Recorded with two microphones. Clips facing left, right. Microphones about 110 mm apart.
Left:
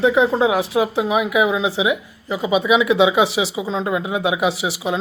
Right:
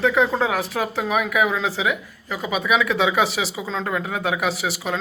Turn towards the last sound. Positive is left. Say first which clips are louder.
# left 3 dB
turn(degrees=20)  # may be behind; listen again after turning